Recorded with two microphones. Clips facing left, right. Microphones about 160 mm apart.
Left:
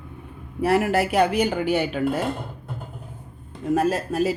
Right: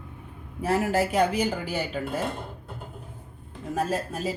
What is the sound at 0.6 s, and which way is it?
A woman's voice, 70° left (ahead or behind).